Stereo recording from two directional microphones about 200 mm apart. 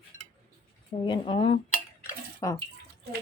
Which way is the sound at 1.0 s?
25° left (ahead or behind).